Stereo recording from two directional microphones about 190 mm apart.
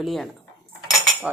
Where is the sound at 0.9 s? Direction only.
Centre (ahead or behind).